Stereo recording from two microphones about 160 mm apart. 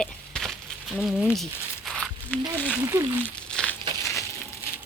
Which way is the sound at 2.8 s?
20° right (ahead or behind).